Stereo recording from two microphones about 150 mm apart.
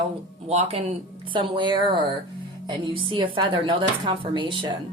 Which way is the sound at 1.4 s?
30° right (ahead or behind).